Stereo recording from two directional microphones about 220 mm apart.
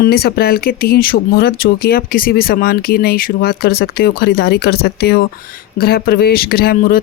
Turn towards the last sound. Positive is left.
turn(degrees=40)  # may be behind; listen again after turning